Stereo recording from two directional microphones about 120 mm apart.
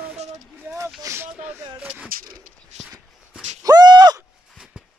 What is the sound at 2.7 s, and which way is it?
Walk, 75° right (ahead or behind).